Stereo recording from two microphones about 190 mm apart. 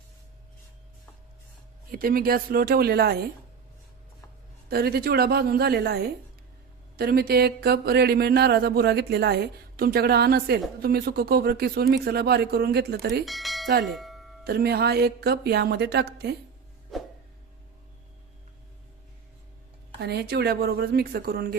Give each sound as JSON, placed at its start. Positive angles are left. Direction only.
{"t": 1.9, "sound": "speech", "side_deg": -50}
{"t": 4.7, "sound": "speech", "side_deg": -55}
{"t": 13.2, "sound": "speech", "side_deg": 0}
{"t": 13.8, "sound": "doorbell", "side_deg": 0}
{"t": 14.4, "sound": "speech", "side_deg": -55}
{"t": 16.9, "sound": "a sound", "side_deg": 0}
{"t": 20.0, "sound": "speech", "side_deg": -60}